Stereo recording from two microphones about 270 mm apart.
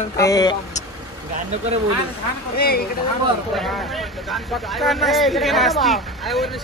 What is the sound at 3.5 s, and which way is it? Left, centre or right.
Speech, centre.